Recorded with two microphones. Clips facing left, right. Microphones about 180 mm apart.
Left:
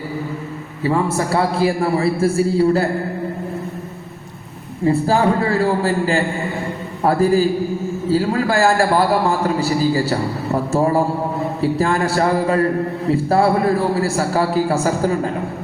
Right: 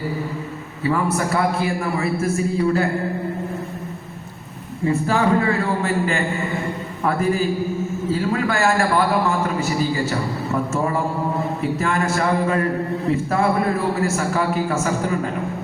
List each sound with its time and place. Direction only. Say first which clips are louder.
0.9 s a man's voice: left 2 dB; 25° left (ahead or behind)
4.9 s a man's voice: left 3 dB; 35° left (ahead or behind)